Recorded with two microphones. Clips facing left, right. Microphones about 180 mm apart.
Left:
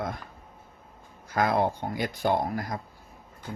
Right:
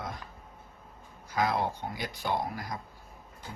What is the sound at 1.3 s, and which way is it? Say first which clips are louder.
Speech: left 4 dB; 55° left (ahead or behind).